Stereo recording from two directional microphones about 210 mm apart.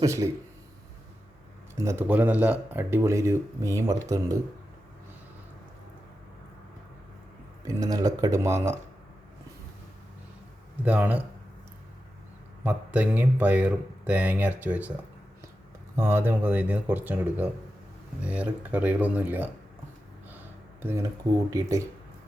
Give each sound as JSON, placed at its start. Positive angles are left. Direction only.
{"t": 0.0, "sound": "speech", "side_deg": -15}
{"t": 1.8, "sound": "speech", "side_deg": -10}
{"t": 7.7, "sound": "speech", "side_deg": -15}
{"t": 10.8, "sound": "speech", "side_deg": -5}
{"t": 12.6, "sound": "speech", "side_deg": -5}
{"t": 16.0, "sound": "speech", "side_deg": -10}
{"t": 21.5, "sound": "speech", "side_deg": -15}